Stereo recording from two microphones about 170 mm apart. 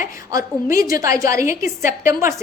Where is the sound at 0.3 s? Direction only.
20° right (ahead or behind).